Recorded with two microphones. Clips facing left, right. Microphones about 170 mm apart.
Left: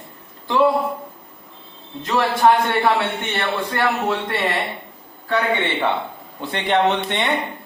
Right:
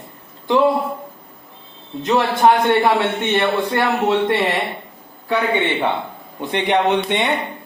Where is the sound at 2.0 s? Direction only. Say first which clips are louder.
Right 2 dB; 20° right (ahead or behind).